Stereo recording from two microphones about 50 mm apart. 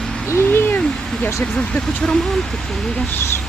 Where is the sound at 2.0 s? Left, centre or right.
Centre.